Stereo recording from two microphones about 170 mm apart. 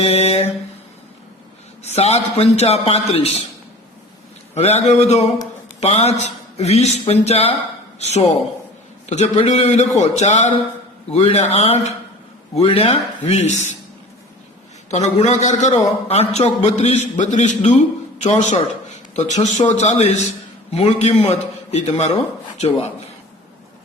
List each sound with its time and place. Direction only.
0.1 s a man's voice: 35° left (ahead or behind)
1.8 s a man's voice: 40° left (ahead or behind)
4.5 s a man's voice: 40° left (ahead or behind)
14.8 s a man's voice: 40° left (ahead or behind)